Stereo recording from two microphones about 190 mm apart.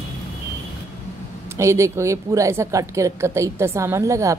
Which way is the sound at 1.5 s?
15° right (ahead or behind).